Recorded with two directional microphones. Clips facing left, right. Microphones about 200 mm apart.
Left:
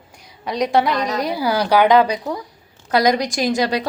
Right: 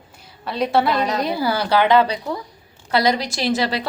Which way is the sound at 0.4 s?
15° left (ahead or behind).